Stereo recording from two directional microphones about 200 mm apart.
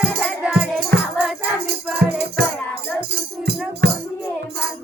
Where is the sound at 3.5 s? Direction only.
55° right (ahead or behind).